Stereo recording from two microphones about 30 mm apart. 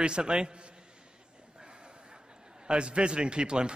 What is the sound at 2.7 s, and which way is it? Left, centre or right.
A man's voice, right.